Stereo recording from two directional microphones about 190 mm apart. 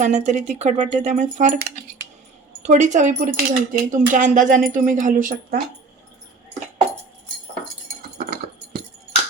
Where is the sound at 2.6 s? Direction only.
40° right (ahead or behind).